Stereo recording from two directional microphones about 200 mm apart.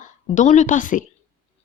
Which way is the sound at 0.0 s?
35° left (ahead or behind).